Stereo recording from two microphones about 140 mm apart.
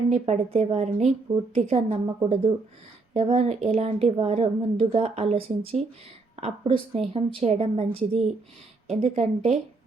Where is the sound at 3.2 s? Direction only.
50° right (ahead or behind).